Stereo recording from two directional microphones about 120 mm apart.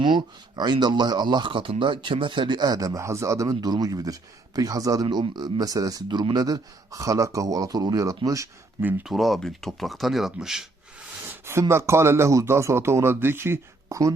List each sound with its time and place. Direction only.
0.0 s speech: 40° right (ahead or behind)
5.0 s speech: 40° right (ahead or behind)
8.8 s speech: 15° right (ahead or behind)
9.0 s speech: centre (ahead or behind)
11.3 s a sound: 20° right (ahead or behind)
11.7 s speech: 20° right (ahead or behind)